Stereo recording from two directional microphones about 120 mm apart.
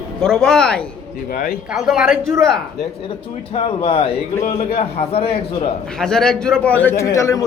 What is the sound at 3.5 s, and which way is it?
A man's voice, 55° left (ahead or behind).